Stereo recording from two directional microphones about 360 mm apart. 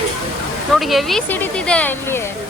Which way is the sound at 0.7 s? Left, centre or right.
Centre.